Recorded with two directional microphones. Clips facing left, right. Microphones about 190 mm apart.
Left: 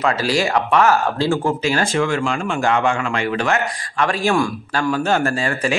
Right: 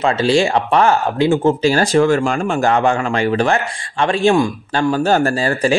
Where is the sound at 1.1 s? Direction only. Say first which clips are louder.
Right 5 dB; 20° right (ahead or behind).